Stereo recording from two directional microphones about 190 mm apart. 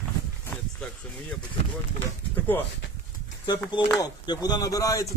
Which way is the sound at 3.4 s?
25° left (ahead or behind).